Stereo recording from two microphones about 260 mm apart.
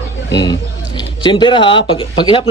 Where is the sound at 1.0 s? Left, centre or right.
Centre.